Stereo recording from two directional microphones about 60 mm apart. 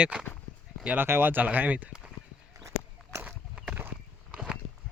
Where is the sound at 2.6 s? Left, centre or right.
Right.